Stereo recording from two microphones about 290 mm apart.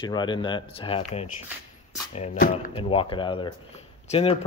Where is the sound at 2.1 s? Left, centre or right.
Left.